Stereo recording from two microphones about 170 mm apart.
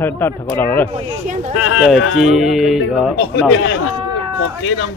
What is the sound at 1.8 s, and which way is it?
Speech, centre (ahead or behind).